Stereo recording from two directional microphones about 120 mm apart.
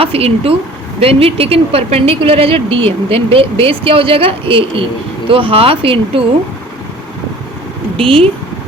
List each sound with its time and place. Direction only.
0.0 s a woman's voice: 55° right (ahead or behind)
7.9 s a woman's voice: 50° right (ahead or behind)